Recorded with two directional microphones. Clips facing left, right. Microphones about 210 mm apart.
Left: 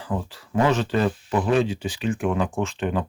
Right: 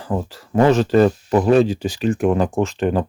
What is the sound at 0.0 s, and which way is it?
Speech, 40° right (ahead or behind).